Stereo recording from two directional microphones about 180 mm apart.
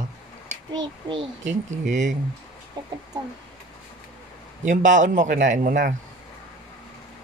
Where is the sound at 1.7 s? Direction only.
45° right (ahead or behind).